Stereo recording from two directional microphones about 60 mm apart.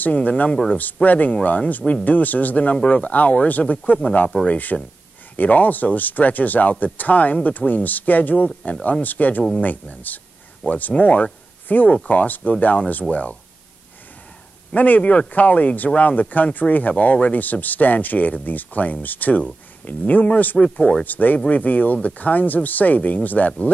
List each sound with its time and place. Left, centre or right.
0.0 s speech: left
14.7 s speech: left
21.0 s speech: left